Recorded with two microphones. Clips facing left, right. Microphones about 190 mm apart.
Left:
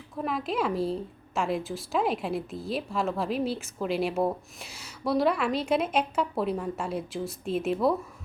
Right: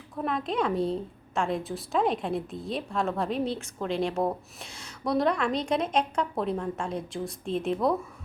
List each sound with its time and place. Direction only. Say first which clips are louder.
0.2 s a woman's voice: right 1 dB; 5° left (ahead or behind)